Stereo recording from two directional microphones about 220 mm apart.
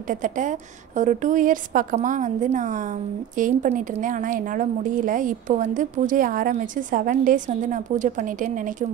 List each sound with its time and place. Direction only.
0.1 s a woman's voice: 35° right (ahead or behind)